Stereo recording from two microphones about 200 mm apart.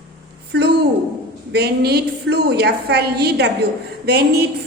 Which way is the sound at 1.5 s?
55° right (ahead or behind).